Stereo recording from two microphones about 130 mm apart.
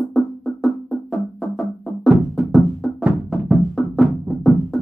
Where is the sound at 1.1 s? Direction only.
5° left (ahead or behind).